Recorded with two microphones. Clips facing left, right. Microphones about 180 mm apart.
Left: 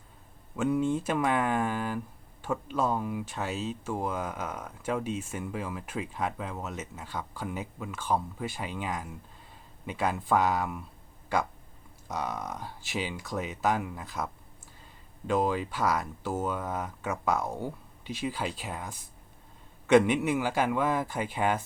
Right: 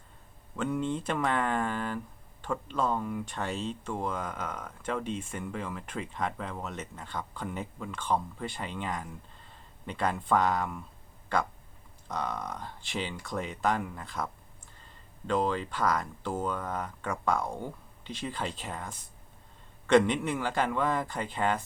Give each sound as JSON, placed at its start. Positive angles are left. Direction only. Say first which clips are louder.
{"t": 0.5, "sound": "speech", "louder": "left 4 dB", "side_deg": 10}
{"t": 15.3, "sound": "speech", "louder": "left 1 dB", "side_deg": 10}